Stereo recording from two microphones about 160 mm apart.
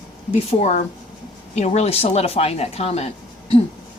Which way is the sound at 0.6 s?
45° left (ahead or behind).